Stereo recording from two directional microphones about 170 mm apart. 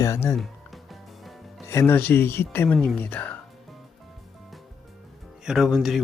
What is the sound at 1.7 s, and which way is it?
Speech, 15° left (ahead or behind).